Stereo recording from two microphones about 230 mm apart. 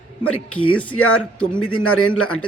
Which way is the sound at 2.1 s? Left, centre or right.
Centre.